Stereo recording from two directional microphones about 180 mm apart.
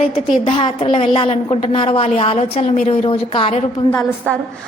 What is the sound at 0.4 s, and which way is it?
A woman's voice, 30° left (ahead or behind).